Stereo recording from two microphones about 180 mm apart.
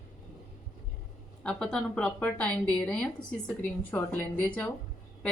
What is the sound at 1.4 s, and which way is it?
A woman's voice, 5° left (ahead or behind).